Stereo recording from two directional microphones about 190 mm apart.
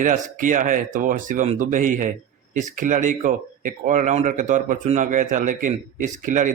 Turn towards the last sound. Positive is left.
turn(degrees=-40)  # may be behind; listen again after turning